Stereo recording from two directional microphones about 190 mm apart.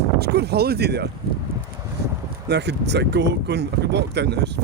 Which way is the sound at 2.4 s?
60° right (ahead or behind).